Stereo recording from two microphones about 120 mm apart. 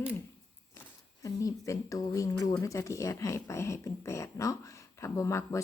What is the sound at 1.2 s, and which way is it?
Speech, 25° left (ahead or behind).